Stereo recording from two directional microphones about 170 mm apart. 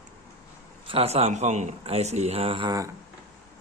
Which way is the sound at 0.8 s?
35° right (ahead or behind).